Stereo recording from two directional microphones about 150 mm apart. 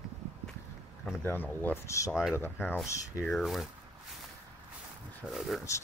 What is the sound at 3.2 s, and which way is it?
Speech, centre (ahead or behind).